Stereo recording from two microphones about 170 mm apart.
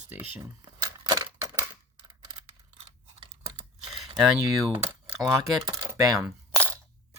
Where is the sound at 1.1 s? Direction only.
20° right (ahead or behind).